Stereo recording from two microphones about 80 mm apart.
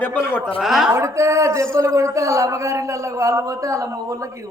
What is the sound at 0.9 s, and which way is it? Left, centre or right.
A man's voice, right.